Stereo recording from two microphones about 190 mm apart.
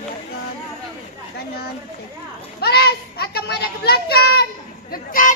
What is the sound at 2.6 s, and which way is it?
Children playing, 55° left (ahead or behind).